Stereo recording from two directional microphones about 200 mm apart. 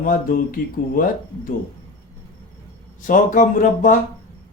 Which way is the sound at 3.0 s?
40° left (ahead or behind).